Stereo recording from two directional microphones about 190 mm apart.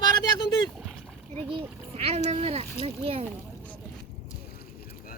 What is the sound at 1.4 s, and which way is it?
Speech, 30° right (ahead or behind).